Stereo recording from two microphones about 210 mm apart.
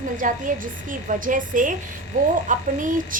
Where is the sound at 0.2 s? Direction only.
40° right (ahead or behind).